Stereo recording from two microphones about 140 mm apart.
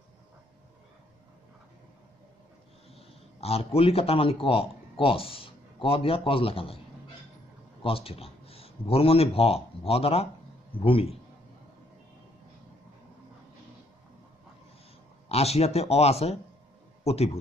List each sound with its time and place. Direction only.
2.9 s speech: 45° left (ahead or behind)
7.8 s speech: 40° left (ahead or behind)
15.2 s a man's voice: 50° left (ahead or behind)